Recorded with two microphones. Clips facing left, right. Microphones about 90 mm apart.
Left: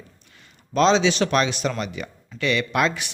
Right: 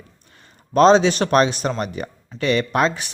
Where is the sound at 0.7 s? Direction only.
45° right (ahead or behind).